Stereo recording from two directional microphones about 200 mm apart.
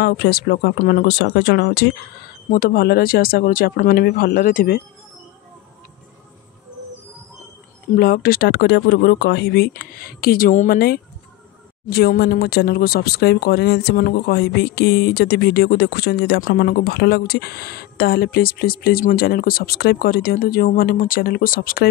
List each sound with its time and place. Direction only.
0.0 s speech: 55° left (ahead or behind)
7.9 s speech: 45° left (ahead or behind)